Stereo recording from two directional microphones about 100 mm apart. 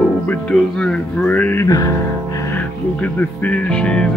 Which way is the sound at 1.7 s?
35° left (ahead or behind).